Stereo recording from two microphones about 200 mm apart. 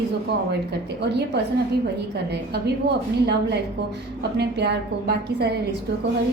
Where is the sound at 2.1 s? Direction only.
55° right (ahead or behind).